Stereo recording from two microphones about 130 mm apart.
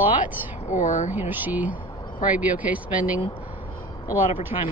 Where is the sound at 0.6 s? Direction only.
75° left (ahead or behind).